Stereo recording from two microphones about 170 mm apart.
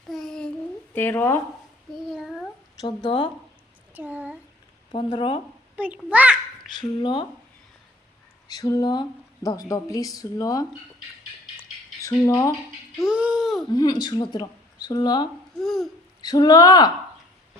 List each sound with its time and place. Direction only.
0.1 s babbling: 5° left (ahead or behind)
0.9 s speech: 10° left (ahead or behind)
1.9 s child singing: centre (ahead or behind)
2.8 s speech: 25° left (ahead or behind)
3.9 s speech: 10° right (ahead or behind)
4.9 s speech: 30° left (ahead or behind)
5.7 s a child's voice: 10° right (ahead or behind)
6.7 s speech: 25° left (ahead or behind)
8.4 s speech: 20° left (ahead or behind)
12.0 s speech: 15° left (ahead or behind)
13.1 s speech: 5° right (ahead or behind)
13.7 s speech: 25° left (ahead or behind)
15.5 s speech: centre (ahead or behind)
16.2 s speech: 25° left (ahead or behind)